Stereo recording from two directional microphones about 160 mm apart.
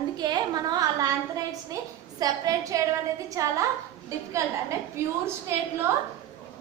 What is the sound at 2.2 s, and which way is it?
A woman's voice, 20° right (ahead or behind).